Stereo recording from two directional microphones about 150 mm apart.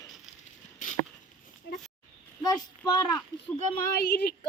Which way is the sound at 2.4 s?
25° left (ahead or behind).